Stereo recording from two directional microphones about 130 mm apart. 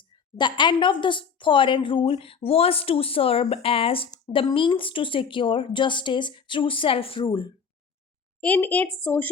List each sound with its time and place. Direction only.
0.3 s a woman's voice: 35° left (ahead or behind)
8.4 s a woman's voice: 10° left (ahead or behind)